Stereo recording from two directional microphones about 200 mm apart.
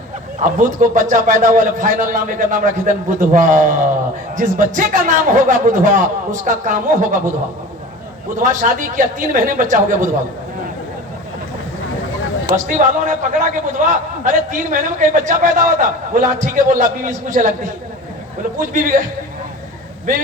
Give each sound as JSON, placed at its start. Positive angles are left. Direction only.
{"t": 0.4, "sound": "a man's voice", "side_deg": -40}
{"t": 8.4, "sound": "a man's voice", "side_deg": -40}
{"t": 12.5, "sound": "a man's voice", "side_deg": -40}
{"t": 18.7, "sound": "a man's voice", "side_deg": -40}